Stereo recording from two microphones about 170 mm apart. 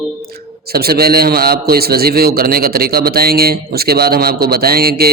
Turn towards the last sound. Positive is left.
turn(degrees=-65)  # may be behind; listen again after turning